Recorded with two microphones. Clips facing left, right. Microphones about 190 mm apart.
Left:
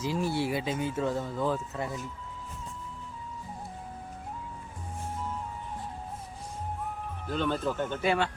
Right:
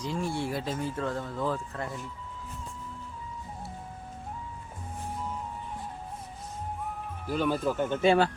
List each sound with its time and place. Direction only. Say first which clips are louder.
0.0 s speech: left 2 dB; 5° left (ahead or behind)
7.3 s speech: right 2 dB; 10° right (ahead or behind)
8.0 s speech: right 5 dB; 25° right (ahead or behind)